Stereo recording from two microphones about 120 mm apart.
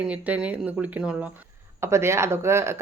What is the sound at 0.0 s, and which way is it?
Speech, 10° right (ahead or behind).